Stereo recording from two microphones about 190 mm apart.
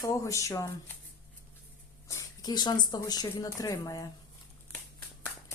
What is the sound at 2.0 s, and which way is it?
Speech, 20° left (ahead or behind).